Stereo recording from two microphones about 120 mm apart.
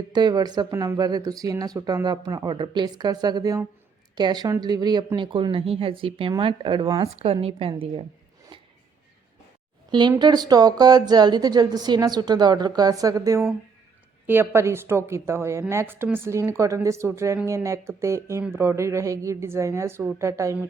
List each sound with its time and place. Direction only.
0.1 s a woman's voice: 35° right (ahead or behind)
7.4 s speech: 50° right (ahead or behind)
10.1 s a woman's voice: 35° right (ahead or behind)